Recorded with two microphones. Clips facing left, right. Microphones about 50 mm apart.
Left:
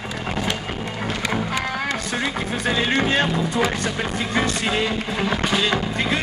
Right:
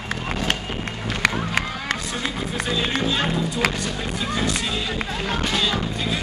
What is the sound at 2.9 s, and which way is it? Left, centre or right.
Music, left.